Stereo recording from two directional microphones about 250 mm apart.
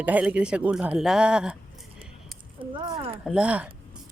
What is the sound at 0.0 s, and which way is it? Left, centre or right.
Speech, centre.